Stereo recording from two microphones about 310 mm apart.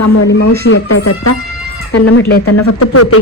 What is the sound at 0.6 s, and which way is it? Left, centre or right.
Speech, left.